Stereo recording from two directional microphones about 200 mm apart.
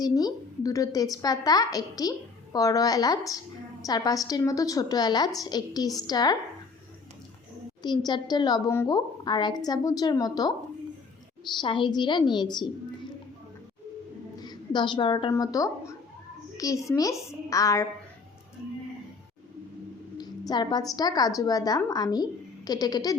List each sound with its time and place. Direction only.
0.0 s a woman's voice: 20° left (ahead or behind)
7.8 s a woman's voice: 20° left (ahead or behind)
11.6 s a woman's voice: 25° left (ahead or behind)
14.3 s a sound: 20° left (ahead or behind)
15.3 s a woman's voice: 15° left (ahead or behind)
20.5 s a woman's voice: 20° left (ahead or behind)